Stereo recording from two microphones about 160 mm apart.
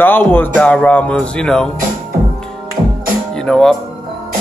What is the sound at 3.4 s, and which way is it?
Speech, centre (ahead or behind).